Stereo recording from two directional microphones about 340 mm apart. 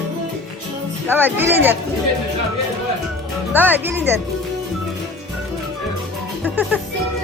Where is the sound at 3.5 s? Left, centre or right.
Centre.